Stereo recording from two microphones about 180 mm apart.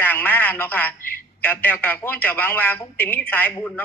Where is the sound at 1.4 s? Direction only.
10° left (ahead or behind).